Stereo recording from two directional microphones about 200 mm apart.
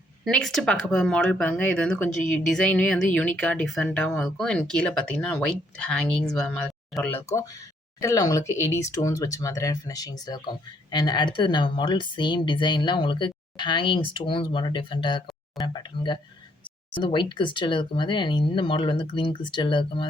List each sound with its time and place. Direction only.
0.3 s speech: 5° left (ahead or behind); by 20.1 s 25° left (ahead or behind)